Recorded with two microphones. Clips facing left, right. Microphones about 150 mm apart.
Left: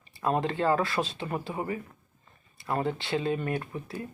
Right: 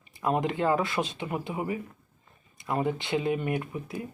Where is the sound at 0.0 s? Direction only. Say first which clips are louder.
Right 1 dB; 15° right (ahead or behind).